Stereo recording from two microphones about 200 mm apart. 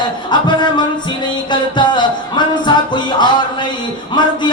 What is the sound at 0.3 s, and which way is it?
Music, 20° left (ahead or behind).